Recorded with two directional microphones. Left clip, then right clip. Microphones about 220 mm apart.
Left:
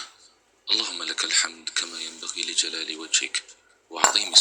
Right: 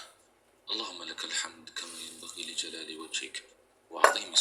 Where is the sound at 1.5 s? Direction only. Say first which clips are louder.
Left 12 dB; 15° left (ahead or behind).